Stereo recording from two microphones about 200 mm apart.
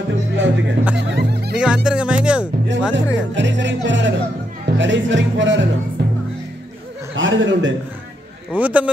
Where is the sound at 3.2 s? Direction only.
65° right (ahead or behind).